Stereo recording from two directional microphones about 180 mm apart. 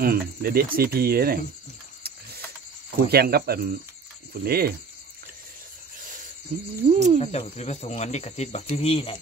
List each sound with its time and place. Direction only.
0.0 s speech: 55° right (ahead or behind)
3.1 s speech: 60° right (ahead or behind)
6.9 s speech: 35° right (ahead or behind)
7.2 s cricket: 35° left (ahead or behind)